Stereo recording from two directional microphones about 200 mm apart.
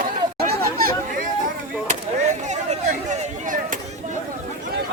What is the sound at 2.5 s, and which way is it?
Chop, 35° right (ahead or behind).